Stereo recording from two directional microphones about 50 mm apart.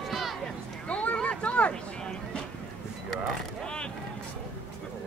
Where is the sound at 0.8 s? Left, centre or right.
Left.